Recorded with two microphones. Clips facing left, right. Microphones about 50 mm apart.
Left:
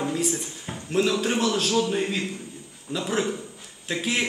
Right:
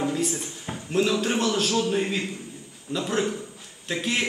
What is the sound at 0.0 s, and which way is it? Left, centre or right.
A man's voice, centre.